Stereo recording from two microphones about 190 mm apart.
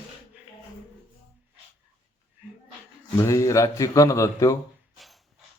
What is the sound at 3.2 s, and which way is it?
Speech, 15° left (ahead or behind).